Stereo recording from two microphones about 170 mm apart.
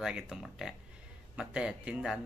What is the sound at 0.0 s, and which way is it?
Speech, 5° right (ahead or behind).